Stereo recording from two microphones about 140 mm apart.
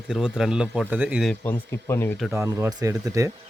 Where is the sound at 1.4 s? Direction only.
15° left (ahead or behind).